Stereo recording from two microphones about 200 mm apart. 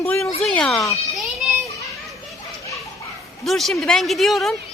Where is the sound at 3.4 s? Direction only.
Centre (ahead or behind).